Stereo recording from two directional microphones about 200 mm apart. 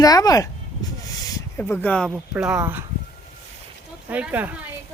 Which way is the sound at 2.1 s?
5° right (ahead or behind).